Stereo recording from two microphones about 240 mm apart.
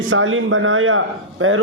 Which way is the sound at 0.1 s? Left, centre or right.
Right.